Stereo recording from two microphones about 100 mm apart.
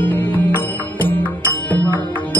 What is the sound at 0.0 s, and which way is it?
Music, 20° left (ahead or behind).